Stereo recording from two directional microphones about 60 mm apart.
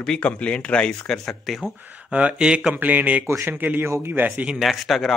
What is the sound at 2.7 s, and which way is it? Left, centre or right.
Speech, right.